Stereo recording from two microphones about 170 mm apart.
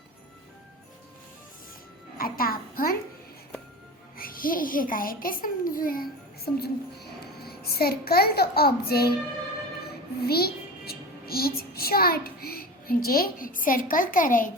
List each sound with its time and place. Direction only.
2.1 s a child's voice: 60° left (ahead or behind)
4.2 s a child's voice: 55° left (ahead or behind)
10.2 s a child's voice: 65° left (ahead or behind)